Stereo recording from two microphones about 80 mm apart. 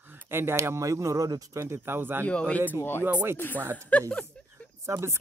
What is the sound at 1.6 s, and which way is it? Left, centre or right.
Speech, right.